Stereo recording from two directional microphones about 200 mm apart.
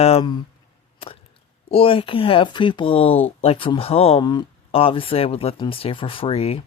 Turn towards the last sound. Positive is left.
turn(degrees=30)  # may be behind; listen again after turning